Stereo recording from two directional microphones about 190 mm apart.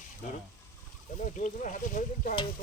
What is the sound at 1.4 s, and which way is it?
Speech, 40° left (ahead or behind).